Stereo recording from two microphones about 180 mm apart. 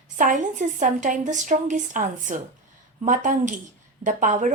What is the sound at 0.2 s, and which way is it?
A woman's voice, 45° right (ahead or behind).